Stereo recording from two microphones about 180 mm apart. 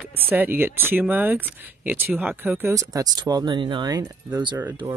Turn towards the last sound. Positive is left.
turn(degrees=-20)  # may be behind; listen again after turning